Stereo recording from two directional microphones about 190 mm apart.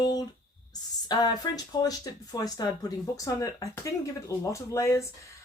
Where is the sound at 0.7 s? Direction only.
20° left (ahead or behind).